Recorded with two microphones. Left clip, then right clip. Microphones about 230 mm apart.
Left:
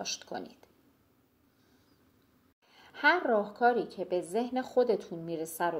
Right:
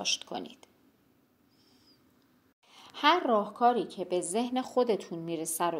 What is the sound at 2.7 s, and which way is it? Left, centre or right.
A woman's voice, right.